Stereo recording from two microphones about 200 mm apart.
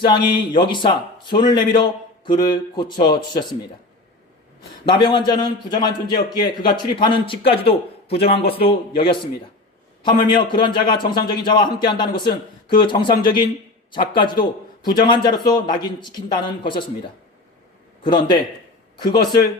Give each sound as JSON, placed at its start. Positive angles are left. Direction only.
{"t": 0.1, "sound": "speech", "side_deg": 25}
{"t": 4.9, "sound": "speech", "side_deg": 25}